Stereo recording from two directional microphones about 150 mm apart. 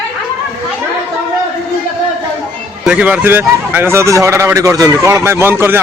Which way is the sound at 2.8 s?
10° right (ahead or behind).